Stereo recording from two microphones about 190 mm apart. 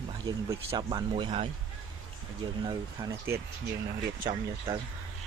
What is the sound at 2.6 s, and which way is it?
Speech, 15° right (ahead or behind).